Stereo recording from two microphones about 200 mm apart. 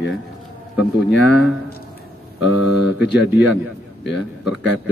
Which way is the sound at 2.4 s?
5° right (ahead or behind).